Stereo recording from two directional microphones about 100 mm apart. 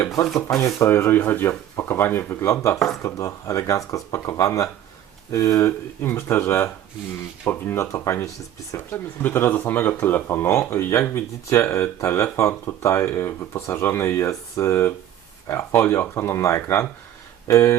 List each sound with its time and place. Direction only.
0.3 s speech: 30° left (ahead or behind)
2.7 s speech: centre (ahead or behind)
3.0 s speech: 30° left (ahead or behind)